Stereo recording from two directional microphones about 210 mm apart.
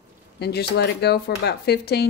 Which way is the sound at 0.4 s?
50° left (ahead or behind).